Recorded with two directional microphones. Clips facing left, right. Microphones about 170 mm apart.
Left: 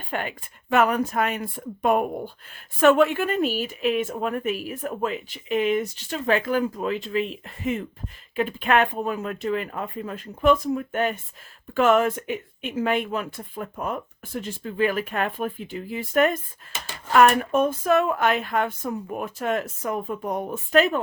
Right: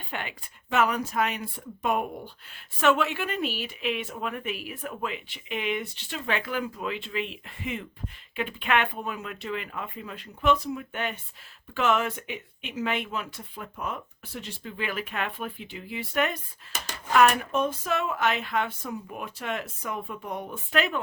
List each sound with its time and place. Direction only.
0.1 s speech: 45° left (ahead or behind)